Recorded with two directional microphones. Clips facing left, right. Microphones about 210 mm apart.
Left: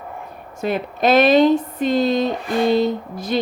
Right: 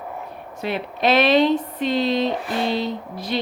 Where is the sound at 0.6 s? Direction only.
45° left (ahead or behind).